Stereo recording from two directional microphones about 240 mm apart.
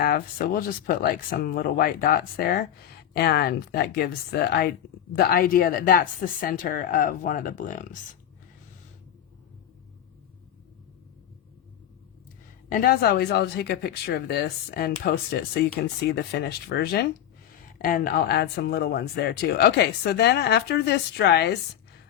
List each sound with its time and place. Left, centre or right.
0.0 s a woman's voice: left
12.6 s a woman's voice: left